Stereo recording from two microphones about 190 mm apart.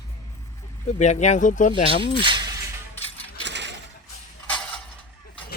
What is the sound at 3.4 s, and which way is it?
Mechanisms, 65° right (ahead or behind).